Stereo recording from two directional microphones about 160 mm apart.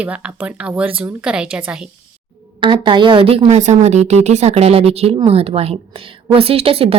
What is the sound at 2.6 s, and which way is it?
A woman's voice, 30° right (ahead or behind).